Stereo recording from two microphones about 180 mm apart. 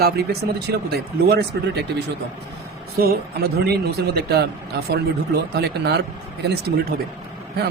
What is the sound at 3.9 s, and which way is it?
Speech, 60° right (ahead or behind).